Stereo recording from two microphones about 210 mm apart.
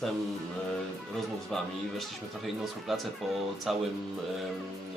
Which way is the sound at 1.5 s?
Centre (ahead or behind).